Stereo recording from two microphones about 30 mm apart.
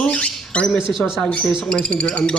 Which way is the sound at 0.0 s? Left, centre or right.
Left.